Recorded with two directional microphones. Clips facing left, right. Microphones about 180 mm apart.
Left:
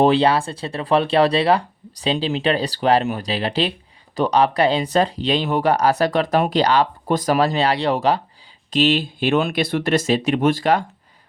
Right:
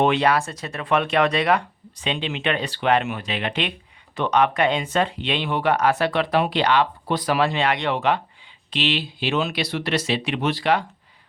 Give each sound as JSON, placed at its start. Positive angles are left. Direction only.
{"t": 0.0, "sound": "speech", "side_deg": 30}